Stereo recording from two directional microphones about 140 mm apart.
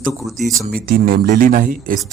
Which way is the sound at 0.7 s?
90° right.